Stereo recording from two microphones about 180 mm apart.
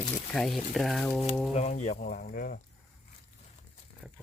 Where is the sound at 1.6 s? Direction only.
40° left (ahead or behind).